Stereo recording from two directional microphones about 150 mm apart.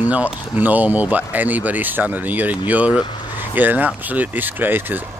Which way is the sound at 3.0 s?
30° left (ahead or behind).